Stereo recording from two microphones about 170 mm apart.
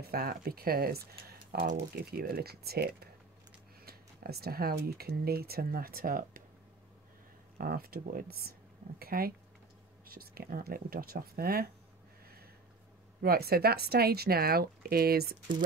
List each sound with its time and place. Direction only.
0.0 s speech: 65° right (ahead or behind)
7.5 s speech: 60° right (ahead or behind)
13.2 s speech: 65° right (ahead or behind)